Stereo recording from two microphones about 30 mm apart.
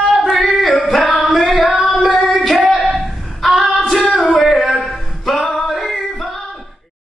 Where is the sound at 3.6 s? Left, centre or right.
Right.